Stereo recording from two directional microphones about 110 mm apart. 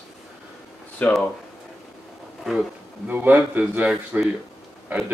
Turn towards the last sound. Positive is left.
turn(degrees=-15)  # may be behind; listen again after turning